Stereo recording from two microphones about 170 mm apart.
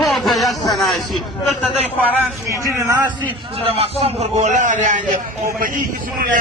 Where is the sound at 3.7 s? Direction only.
35° right (ahead or behind); by 5.8 s 55° right (ahead or behind).